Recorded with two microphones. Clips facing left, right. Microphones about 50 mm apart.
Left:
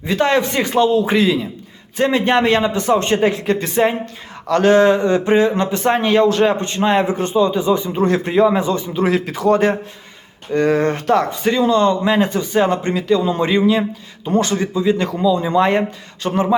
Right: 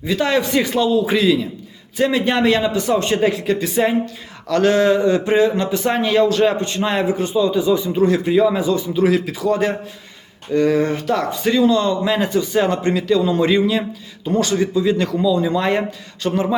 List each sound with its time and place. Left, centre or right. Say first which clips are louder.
0.0 s a man's voice: left 2 dB; left